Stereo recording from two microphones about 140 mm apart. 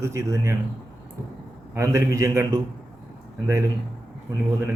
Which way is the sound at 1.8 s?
20° right (ahead or behind).